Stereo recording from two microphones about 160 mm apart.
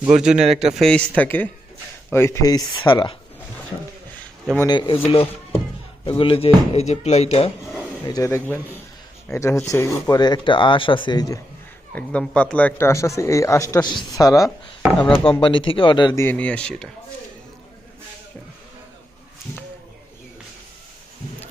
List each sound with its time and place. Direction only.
0.0 s a man's voice: 5° right (ahead or behind); by 3.2 s 30° left (ahead or behind)
4.7 s speech: 30° left (ahead or behind)
8.0 s a man's voice: 20° left (ahead or behind)
11.9 s a man's voice: 5° left (ahead or behind)
14.4 s speech: 10° right (ahead or behind)
15.2 s speech: 30° left (ahead or behind)
16.2 s a man's voice: 10° left (ahead or behind)